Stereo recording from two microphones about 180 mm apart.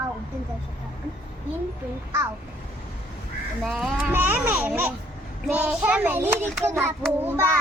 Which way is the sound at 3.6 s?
Centre (ahead or behind).